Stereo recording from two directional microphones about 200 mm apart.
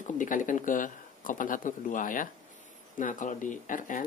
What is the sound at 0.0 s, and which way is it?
Speech, 40° left (ahead or behind).